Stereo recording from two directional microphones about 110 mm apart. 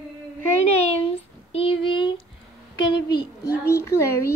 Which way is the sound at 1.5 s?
55° left (ahead or behind).